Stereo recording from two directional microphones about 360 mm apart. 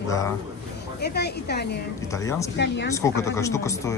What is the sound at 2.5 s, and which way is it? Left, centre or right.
Speech, left.